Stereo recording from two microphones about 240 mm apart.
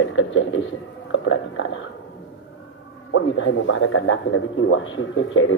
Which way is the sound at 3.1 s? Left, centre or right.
Left.